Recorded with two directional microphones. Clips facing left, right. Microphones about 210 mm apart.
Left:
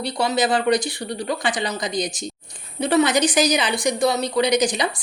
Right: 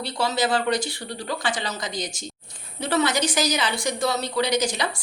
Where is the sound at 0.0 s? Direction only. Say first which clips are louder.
Left 3 dB; 15° left (ahead or behind).